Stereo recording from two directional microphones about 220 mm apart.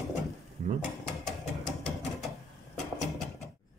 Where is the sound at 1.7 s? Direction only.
5° left (ahead or behind).